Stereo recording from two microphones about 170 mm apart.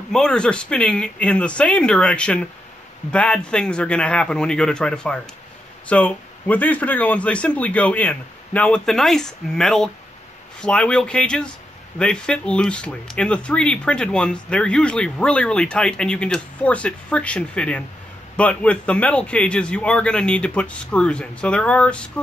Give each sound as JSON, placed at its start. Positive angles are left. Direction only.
{"t": 0.1, "sound": "speech", "side_deg": 5}